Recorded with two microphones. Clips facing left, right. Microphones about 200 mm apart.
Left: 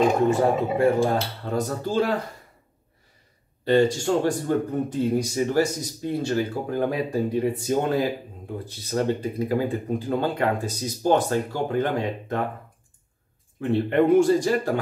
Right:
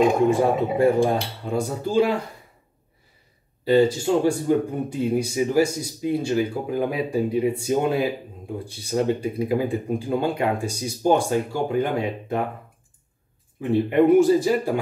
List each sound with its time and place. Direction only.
0.3 s speech: 15° right (ahead or behind)
3.6 s speech: 5° right (ahead or behind)
13.6 s speech: 5° right (ahead or behind)